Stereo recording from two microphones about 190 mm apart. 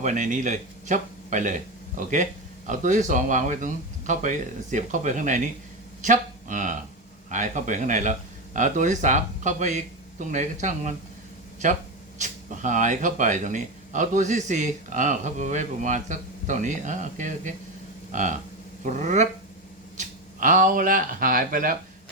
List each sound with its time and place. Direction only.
0.0 s speech: 40° right (ahead or behind)